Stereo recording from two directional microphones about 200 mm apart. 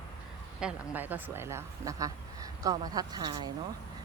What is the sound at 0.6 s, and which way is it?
A woman's voice, 10° right (ahead or behind).